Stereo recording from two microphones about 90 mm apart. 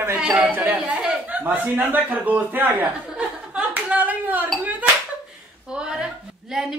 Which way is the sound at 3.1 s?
10° right (ahead or behind).